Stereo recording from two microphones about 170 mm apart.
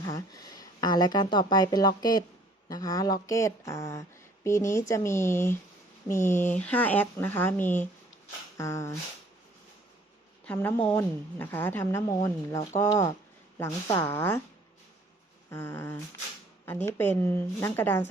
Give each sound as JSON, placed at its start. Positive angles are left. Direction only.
{"t": 0.0, "sound": "a woman's voice", "side_deg": 20}
{"t": 8.5, "sound": "a sound", "side_deg": 15}
{"t": 10.4, "sound": "a woman's voice", "side_deg": 10}
{"t": 15.4, "sound": "a woman's voice", "side_deg": 15}